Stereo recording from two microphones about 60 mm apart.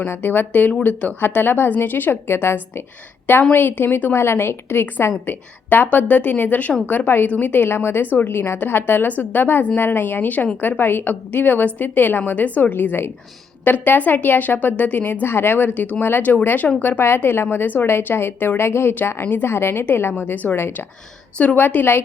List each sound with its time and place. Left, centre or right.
0.1 s a woman's voice: left